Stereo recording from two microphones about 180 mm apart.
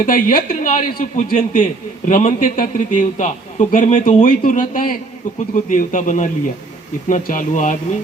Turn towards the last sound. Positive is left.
turn(degrees=45)  # may be behind; listen again after turning